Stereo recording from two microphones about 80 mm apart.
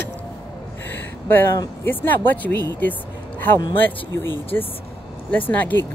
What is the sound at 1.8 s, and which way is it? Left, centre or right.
Speech, left.